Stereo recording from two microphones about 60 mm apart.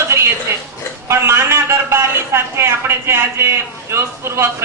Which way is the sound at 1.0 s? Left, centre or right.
Right.